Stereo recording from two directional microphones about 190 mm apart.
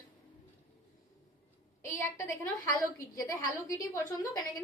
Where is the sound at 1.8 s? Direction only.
15° left (ahead or behind).